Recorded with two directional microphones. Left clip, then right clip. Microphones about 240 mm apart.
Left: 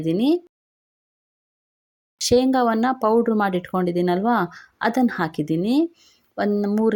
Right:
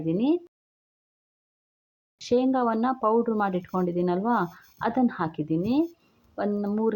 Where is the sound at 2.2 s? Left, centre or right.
Left.